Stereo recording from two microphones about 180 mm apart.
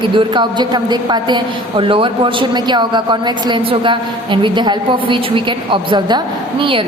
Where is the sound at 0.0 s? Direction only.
25° right (ahead or behind).